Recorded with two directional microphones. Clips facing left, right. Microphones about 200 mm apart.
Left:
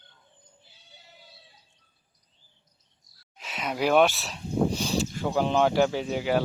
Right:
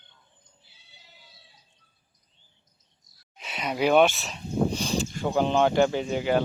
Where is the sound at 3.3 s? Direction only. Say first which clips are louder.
Right 1 dB; centre (ahead or behind).